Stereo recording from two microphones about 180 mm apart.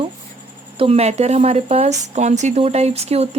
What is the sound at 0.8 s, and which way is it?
Speech, 35° right (ahead or behind).